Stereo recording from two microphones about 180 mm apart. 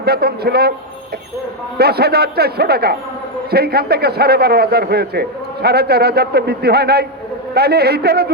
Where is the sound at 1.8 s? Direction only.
60° right (ahead or behind).